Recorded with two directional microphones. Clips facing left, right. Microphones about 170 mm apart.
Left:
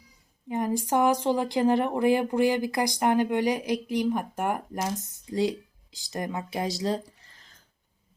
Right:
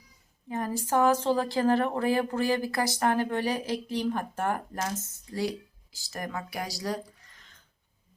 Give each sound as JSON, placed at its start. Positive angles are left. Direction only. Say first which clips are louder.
{"t": 0.4, "sound": "speech", "louder": "left 4 dB", "side_deg": 15}